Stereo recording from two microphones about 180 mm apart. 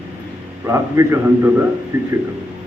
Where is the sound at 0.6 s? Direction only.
15° right (ahead or behind).